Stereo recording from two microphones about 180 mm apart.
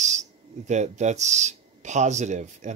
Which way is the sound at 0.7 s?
40° right (ahead or behind).